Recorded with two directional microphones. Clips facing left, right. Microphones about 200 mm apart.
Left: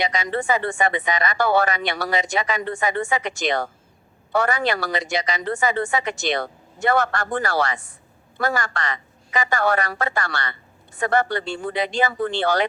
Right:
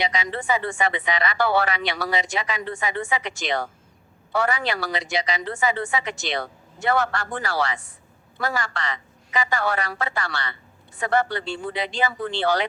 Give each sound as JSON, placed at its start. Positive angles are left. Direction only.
{"t": 0.0, "sound": "a woman's voice", "side_deg": 45}